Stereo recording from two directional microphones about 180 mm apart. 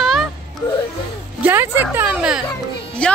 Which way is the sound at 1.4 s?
10° right (ahead or behind).